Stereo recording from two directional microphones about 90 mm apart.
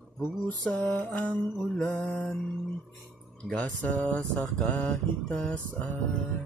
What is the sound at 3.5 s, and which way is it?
Speech, 15° left (ahead or behind).